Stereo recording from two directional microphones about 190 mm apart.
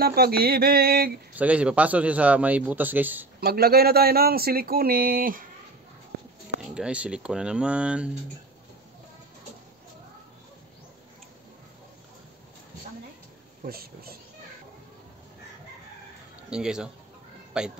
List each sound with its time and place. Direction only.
0.0 s speech: 55° right (ahead or behind)
1.4 s a man's voice: 5° right (ahead or behind)
3.3 s speech: 55° right (ahead or behind)
6.7 s speech: 5° right (ahead or behind)
13.7 s speech: 50° right (ahead or behind)
16.4 s speech: 5° right (ahead or behind)